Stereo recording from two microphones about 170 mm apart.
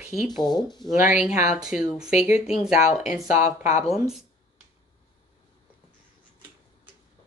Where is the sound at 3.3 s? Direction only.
45° left (ahead or behind).